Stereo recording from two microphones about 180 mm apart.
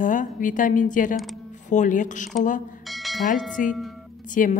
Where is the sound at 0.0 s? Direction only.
45° left (ahead or behind).